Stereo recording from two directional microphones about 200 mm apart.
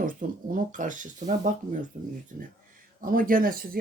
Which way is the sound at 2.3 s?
40° right (ahead or behind).